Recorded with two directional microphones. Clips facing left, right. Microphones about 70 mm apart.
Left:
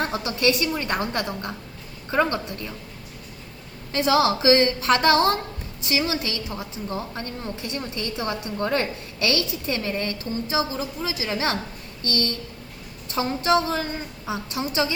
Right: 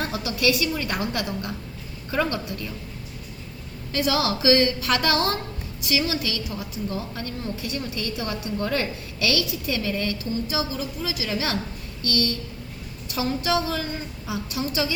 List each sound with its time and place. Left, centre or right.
0.0 s a woman's voice: left
3.9 s a woman's voice: left